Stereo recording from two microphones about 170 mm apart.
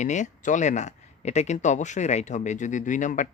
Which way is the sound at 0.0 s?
45° left (ahead or behind).